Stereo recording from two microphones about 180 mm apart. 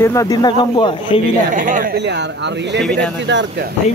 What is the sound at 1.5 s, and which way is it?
Speech, 50° right (ahead or behind).